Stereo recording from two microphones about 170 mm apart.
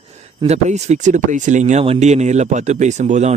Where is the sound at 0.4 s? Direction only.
40° right (ahead or behind).